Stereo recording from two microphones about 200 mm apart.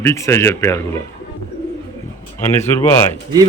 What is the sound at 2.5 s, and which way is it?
Speech, 10° left (ahead or behind).